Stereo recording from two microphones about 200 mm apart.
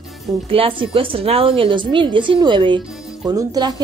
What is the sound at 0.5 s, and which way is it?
Speech, 25° right (ahead or behind).